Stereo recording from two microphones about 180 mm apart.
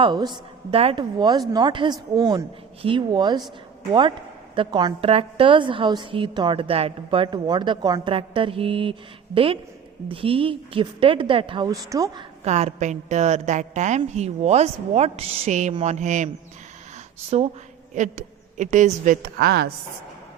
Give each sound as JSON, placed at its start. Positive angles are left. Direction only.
{"t": 0.0, "sound": "a woman's voice", "side_deg": -25}
{"t": 4.5, "sound": "a woman's voice", "side_deg": -25}
{"t": 12.5, "sound": "a woman's voice", "side_deg": -40}